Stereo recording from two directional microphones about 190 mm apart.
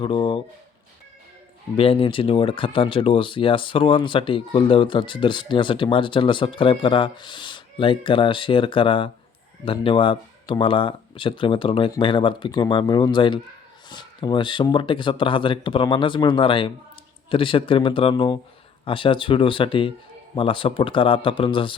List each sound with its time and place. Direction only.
0.0 s speech: 25° left (ahead or behind)
1.7 s speech: 30° left (ahead or behind)